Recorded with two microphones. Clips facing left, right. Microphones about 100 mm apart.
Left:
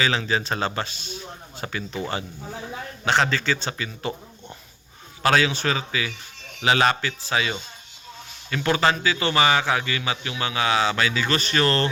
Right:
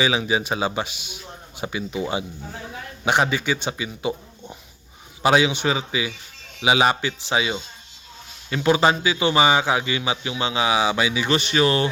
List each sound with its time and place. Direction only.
0.0 s a man's voice: 15° right (ahead or behind)